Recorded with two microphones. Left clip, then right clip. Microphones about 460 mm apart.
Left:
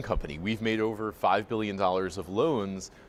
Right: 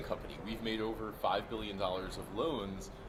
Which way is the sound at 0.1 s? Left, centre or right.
Left.